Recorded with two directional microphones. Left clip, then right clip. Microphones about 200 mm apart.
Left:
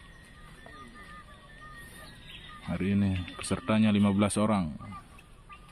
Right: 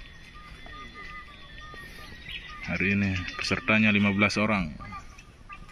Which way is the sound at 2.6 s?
10° left (ahead or behind).